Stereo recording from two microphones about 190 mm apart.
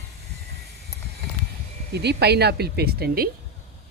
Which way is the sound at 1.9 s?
60° right (ahead or behind).